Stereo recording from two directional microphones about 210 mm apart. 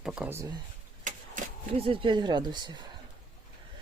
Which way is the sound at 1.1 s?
35° right (ahead or behind).